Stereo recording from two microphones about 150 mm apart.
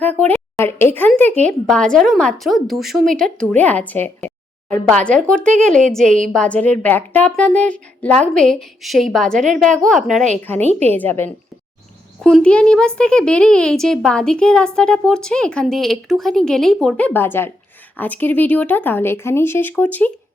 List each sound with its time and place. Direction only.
0.0 s speech: 10° left (ahead or behind)
10.4 s speech: 15° left (ahead or behind)
10.7 s a woman's voice: 45° right (ahead or behind)
10.9 s speech: 10° left (ahead or behind)